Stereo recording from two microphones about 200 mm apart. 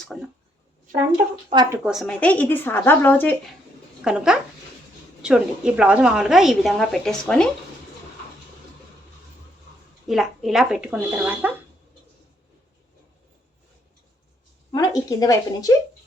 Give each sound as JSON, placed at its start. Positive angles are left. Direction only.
{"t": 0.1, "sound": "a woman's voice", "side_deg": 0}
{"t": 1.5, "sound": "speech", "side_deg": -20}
{"t": 1.8, "sound": "speech", "side_deg": 0}
{"t": 4.0, "sound": "a woman's voice", "side_deg": -5}
{"t": 10.1, "sound": "a woman's voice", "side_deg": 0}
{"t": 14.7, "sound": "speech", "side_deg": 20}